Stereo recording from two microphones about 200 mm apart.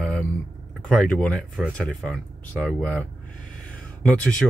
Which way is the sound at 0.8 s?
5° left (ahead or behind).